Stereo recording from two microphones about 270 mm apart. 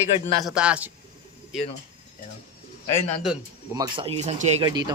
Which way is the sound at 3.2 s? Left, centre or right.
Centre.